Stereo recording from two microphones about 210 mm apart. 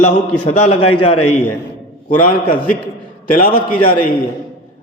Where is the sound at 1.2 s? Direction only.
90° left.